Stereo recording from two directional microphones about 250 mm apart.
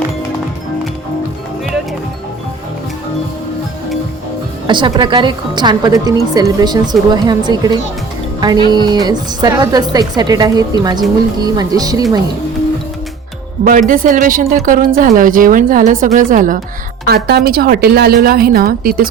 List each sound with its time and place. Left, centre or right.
4.6 s a woman's voice: centre
13.7 s a woman's voice: right